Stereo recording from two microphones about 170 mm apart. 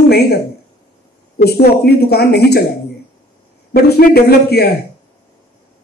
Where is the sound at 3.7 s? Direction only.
65° left (ahead or behind).